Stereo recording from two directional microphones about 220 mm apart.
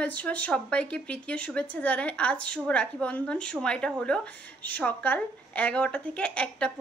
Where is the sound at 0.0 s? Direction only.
5° left (ahead or behind).